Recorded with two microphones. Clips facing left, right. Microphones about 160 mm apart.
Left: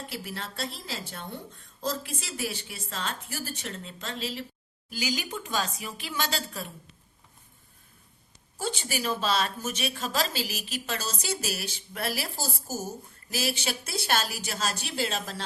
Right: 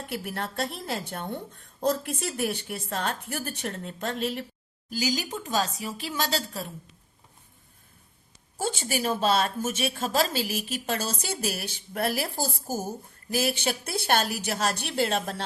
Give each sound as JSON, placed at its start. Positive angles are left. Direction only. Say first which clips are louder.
{"t": 0.1, "sound": "a woman's voice", "louder": "right 5 dB", "side_deg": -55}
{"t": 4.9, "sound": "speech", "louder": "right 3 dB", "side_deg": -40}
{"t": 8.5, "sound": "a woman's voice", "louder": "right 3 dB", "side_deg": -50}